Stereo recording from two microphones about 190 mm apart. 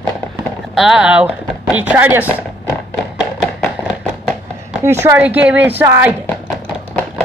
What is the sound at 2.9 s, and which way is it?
Music, centre (ahead or behind).